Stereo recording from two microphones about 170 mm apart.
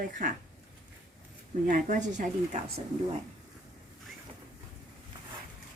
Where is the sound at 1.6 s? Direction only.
50° right (ahead or behind).